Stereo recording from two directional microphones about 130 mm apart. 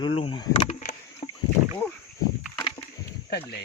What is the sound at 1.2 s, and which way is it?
Rowboat, 45° left (ahead or behind).